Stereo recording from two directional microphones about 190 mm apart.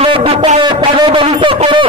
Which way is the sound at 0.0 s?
30° right (ahead or behind).